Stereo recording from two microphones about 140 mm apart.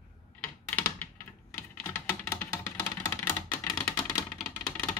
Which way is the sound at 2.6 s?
20° left (ahead or behind).